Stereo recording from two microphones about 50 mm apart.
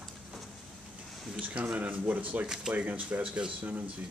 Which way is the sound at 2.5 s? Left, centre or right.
Centre.